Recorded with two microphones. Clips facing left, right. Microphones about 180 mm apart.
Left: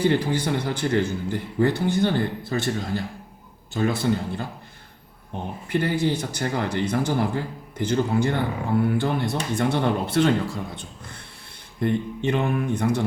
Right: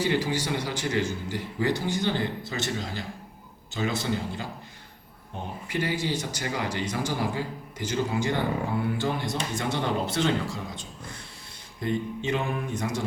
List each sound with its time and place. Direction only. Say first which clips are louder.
0.0 s a man's voice: left 4 dB; 55° left (ahead or behind)
5.6 s a man's voice: left 6 dB; 55° left (ahead or behind)